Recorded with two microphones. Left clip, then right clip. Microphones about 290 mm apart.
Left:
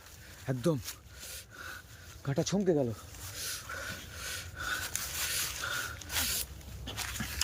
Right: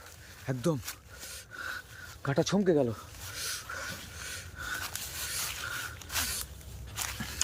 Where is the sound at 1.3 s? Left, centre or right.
Centre.